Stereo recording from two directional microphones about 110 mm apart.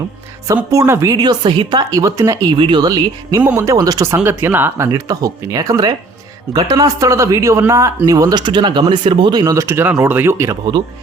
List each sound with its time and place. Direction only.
0.7 s speech: 30° right (ahead or behind)
2.6 s speech: 40° right (ahead or behind)
3.4 s speech: 15° right (ahead or behind)
3.7 s speech: 35° right (ahead or behind)
4.9 s speech: 35° right (ahead or behind); by 9.4 s 50° right (ahead or behind)
9.4 s speech: 30° right (ahead or behind)